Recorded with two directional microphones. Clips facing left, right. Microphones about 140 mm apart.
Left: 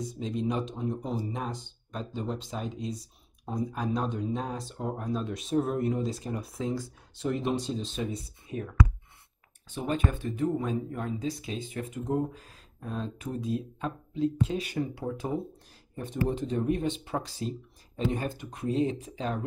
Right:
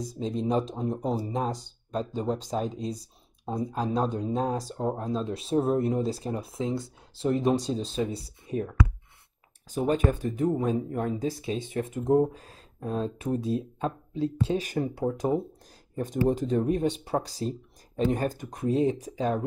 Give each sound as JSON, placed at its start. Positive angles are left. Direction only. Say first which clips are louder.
{"t": 0.0, "sound": "speech", "louder": "right 2 dB", "side_deg": -35}
{"t": 11.4, "sound": "speech", "louder": "right 5 dB", "side_deg": -25}
{"t": 12.1, "sound": "speech", "louder": "right 8 dB", "side_deg": -35}